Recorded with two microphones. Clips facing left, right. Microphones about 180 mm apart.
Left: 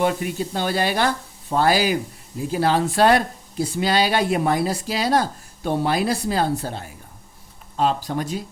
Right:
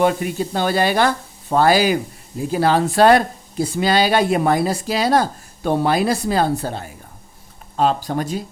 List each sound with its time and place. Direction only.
0.0 s speech: 50° right (ahead or behind)
8.0 s speech: 40° right (ahead or behind)